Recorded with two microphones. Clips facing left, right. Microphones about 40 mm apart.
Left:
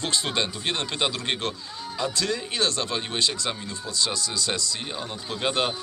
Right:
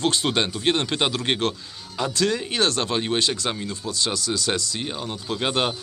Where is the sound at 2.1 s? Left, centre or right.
Right.